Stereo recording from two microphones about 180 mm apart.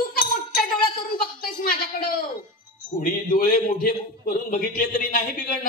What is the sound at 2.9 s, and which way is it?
A man's voice, 50° left (ahead or behind).